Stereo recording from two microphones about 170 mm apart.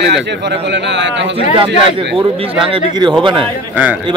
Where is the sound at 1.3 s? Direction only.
30° right (ahead or behind).